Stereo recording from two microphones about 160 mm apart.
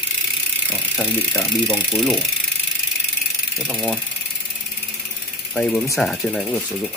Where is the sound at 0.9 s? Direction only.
15° left (ahead or behind).